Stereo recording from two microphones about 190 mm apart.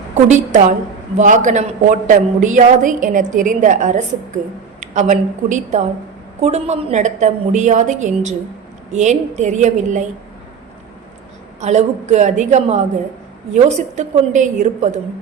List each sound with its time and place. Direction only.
0.3 s a woman's voice: 40° right (ahead or behind)
11.6 s a woman's voice: 35° right (ahead or behind)